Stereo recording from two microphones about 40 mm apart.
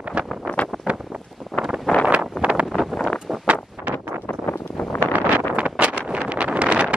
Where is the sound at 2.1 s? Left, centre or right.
Right.